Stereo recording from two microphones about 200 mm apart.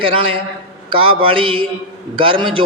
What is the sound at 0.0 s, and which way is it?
A man's voice, 25° right (ahead or behind).